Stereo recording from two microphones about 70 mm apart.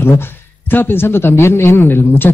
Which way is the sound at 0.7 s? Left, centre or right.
Left.